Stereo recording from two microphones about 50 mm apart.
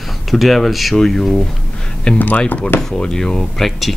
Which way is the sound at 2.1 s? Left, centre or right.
Left.